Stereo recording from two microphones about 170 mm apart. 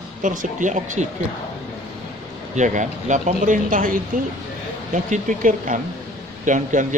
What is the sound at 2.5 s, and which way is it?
Speech, 45° right (ahead or behind).